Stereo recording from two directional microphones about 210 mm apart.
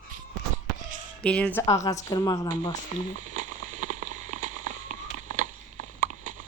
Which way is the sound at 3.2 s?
35° right (ahead or behind).